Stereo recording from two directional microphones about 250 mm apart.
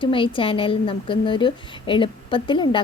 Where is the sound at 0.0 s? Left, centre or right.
Centre.